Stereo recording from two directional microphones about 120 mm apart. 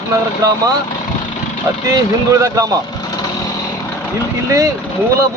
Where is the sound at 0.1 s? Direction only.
30° right (ahead or behind).